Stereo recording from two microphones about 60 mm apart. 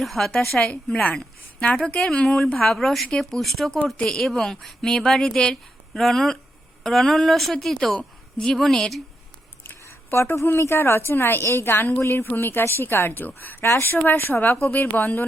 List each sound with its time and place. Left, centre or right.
0.0 s a woman's voice: centre
9.6 s a sound: left
10.4 s a woman's voice: left
13.7 s a woman's voice: left